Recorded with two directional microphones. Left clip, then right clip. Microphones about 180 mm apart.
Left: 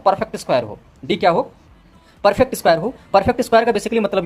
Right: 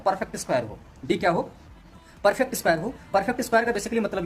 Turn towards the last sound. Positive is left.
turn(degrees=30)  # may be behind; listen again after turning